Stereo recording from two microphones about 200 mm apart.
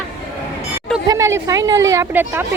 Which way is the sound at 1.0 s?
15° right (ahead or behind).